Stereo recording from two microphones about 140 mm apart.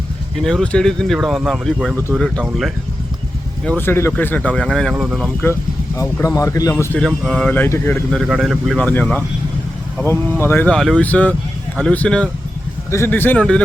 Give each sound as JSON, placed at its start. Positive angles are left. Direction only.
{"t": 0.4, "sound": "speech", "side_deg": 5}
{"t": 3.7, "sound": "speech", "side_deg": 15}
{"t": 5.0, "sound": "speech", "side_deg": -10}
{"t": 6.0, "sound": "speech", "side_deg": 20}
{"t": 7.0, "sound": "speech", "side_deg": 5}
{"t": 8.1, "sound": "speech", "side_deg": 0}
{"t": 10.7, "sound": "speech", "side_deg": 5}
{"t": 12.9, "sound": "speech", "side_deg": 15}